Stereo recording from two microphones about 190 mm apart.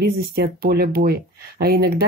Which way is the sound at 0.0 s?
55° right (ahead or behind).